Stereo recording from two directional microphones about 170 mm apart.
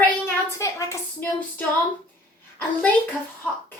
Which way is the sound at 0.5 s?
20° left (ahead or behind).